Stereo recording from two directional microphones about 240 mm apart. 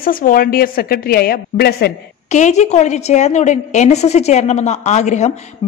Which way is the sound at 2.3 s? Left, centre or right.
Left.